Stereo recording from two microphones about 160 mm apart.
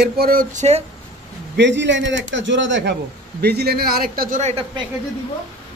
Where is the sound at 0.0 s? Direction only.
70° right (ahead or behind); by 0.8 s 45° right (ahead or behind).